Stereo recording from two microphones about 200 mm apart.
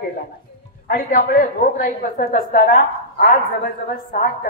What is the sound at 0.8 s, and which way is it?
A woman's voice, 45° left (ahead or behind).